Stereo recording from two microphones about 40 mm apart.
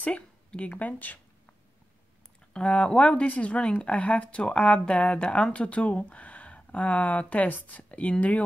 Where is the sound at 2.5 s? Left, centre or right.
Left.